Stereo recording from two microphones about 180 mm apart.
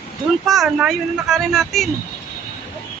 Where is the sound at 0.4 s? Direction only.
Centre (ahead or behind).